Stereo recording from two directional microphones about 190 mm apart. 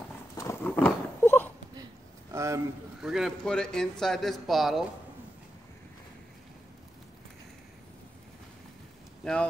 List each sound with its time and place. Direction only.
0.4 s roaring cats: 10° left (ahead or behind)
2.3 s a man's voice: 15° right (ahead or behind)
3.0 s a man's voice: centre (ahead or behind)
9.2 s speech: 5° left (ahead or behind)